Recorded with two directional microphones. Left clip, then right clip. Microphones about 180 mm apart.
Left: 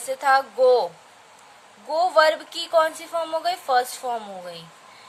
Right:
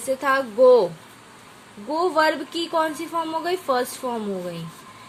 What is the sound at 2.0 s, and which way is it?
A woman's voice, 15° left (ahead or behind).